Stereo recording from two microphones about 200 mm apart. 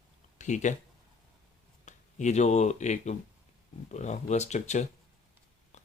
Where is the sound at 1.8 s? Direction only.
35° left (ahead or behind).